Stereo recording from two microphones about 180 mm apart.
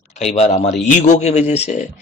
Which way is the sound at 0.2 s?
40° left (ahead or behind).